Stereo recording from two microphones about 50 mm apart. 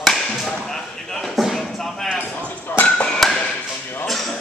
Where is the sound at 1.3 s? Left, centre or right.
Centre.